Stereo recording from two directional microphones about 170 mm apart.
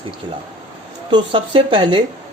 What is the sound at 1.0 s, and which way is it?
Speech, 30° right (ahead or behind).